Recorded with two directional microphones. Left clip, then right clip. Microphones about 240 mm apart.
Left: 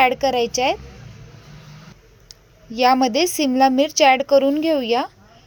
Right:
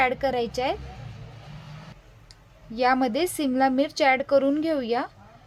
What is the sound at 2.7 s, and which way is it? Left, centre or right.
A woman's voice, centre.